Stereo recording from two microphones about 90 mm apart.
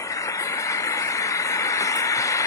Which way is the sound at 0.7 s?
35° left (ahead or behind).